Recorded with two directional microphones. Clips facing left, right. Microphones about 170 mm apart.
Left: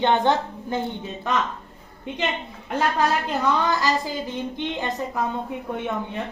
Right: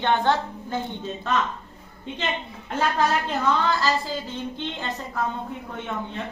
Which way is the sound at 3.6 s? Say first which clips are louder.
Left 1 dB; 15° left (ahead or behind).